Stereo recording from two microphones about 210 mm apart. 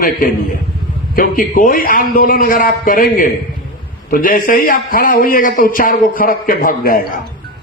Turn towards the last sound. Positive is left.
turn(degrees=40)  # may be behind; listen again after turning